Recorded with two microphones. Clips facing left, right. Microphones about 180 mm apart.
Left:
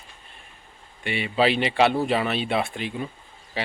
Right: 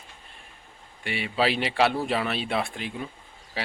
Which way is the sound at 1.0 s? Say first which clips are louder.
Left 3 dB; centre (ahead or behind).